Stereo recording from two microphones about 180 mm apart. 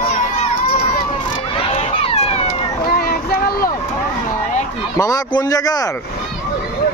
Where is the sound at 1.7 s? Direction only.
35° left (ahead or behind).